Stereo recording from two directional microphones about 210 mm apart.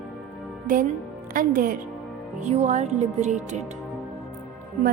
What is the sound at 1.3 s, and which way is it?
Speech, 40° right (ahead or behind).